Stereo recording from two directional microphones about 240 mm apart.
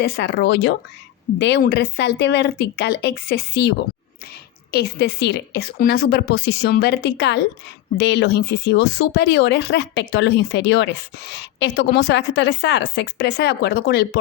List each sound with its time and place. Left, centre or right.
0.0 s speech: left
4.7 s a woman's voice: left